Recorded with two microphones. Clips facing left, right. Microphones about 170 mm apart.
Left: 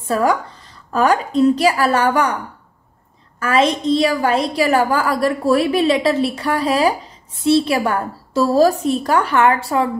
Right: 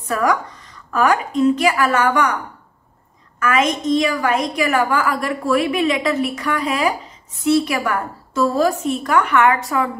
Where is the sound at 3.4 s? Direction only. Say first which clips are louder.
Left 2 dB; 30° left (ahead or behind).